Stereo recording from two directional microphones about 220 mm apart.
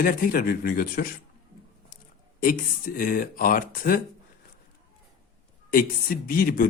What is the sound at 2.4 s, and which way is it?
Speech, 40° left (ahead or behind).